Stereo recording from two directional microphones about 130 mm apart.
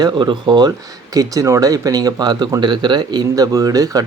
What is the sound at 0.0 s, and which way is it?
Speech, 35° right (ahead or behind).